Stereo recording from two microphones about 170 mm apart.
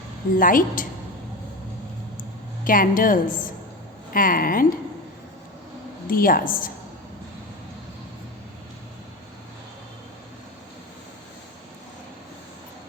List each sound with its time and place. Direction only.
0.3 s a woman's voice: 55° left (ahead or behind)
2.6 s speech: 55° left (ahead or behind)
6.1 s speech: 55° left (ahead or behind)